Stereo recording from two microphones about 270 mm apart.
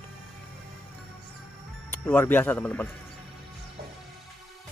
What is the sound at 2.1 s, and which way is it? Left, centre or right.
Speech, centre.